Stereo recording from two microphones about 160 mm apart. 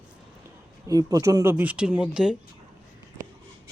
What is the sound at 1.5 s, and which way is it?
Speech, 10° right (ahead or behind).